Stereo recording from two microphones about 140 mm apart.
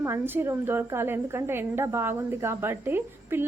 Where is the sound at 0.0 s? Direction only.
15° right (ahead or behind).